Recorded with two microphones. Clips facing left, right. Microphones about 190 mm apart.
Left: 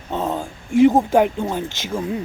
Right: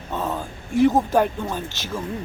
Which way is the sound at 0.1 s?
25° left (ahead or behind).